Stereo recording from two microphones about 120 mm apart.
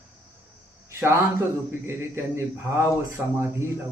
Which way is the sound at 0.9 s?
20° right (ahead or behind).